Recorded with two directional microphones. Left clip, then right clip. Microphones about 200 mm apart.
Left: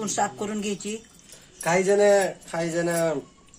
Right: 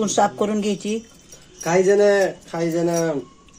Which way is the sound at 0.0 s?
25° right (ahead or behind).